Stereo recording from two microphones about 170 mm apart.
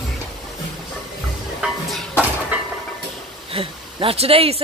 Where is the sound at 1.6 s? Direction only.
5° right (ahead or behind).